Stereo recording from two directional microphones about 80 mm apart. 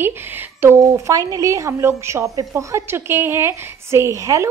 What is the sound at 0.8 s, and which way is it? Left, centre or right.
A woman's voice, right.